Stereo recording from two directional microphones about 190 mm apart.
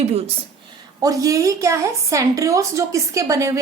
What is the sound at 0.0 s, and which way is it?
Speech, 35° right (ahead or behind).